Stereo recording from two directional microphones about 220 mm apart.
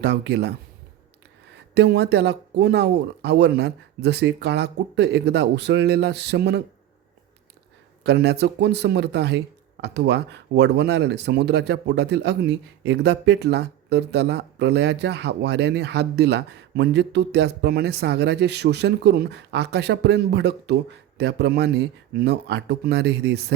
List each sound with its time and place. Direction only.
0.0 s speech: 50° right (ahead or behind)
1.7 s speech: 50° right (ahead or behind)
8.0 s speech: 50° right (ahead or behind)